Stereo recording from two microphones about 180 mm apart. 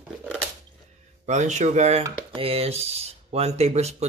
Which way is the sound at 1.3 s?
40° right (ahead or behind).